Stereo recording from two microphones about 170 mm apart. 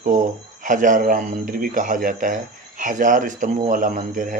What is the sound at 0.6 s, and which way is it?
Speech, 50° right (ahead or behind).